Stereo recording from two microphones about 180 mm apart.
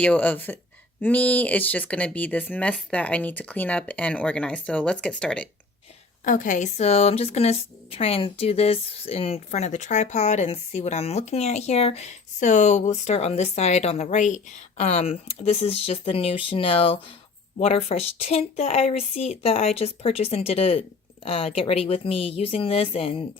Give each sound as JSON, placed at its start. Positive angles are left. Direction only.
{"t": 0.0, "sound": "speech", "side_deg": 10}
{"t": 6.2, "sound": "speech", "side_deg": 45}